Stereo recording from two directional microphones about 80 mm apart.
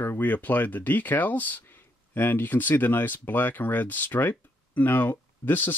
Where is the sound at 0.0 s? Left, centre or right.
Left.